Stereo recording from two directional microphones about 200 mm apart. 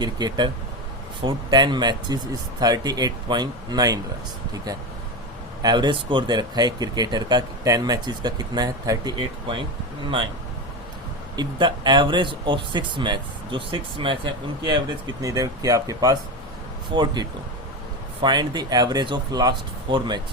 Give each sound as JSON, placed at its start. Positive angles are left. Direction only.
{"t": 0.0, "sound": "speech", "side_deg": -20}
{"t": 11.3, "sound": "speech", "side_deg": -20}
{"t": 15.2, "sound": "speech", "side_deg": -15}